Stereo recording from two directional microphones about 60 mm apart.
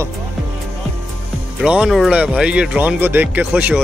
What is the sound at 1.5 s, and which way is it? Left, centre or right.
Speech, centre.